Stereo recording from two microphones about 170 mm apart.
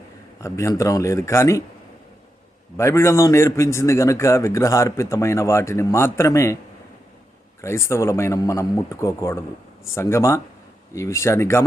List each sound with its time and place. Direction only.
0.4 s a man's voice: 15° left (ahead or behind)
2.7 s a man's voice: 15° left (ahead or behind)
7.6 s a man's voice: 15° left (ahead or behind)